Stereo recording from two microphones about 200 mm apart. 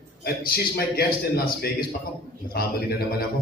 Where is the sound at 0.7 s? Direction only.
50° left (ahead or behind).